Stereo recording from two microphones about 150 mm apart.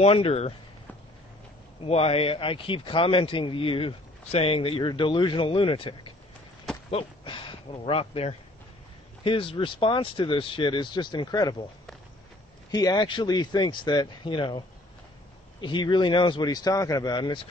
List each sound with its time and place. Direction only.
0.0 s a man's voice: 40° left (ahead or behind)
1.9 s a man's voice: 40° left (ahead or behind)
12.7 s a man's voice: 25° left (ahead or behind)
15.6 s a man's voice: 30° left (ahead or behind)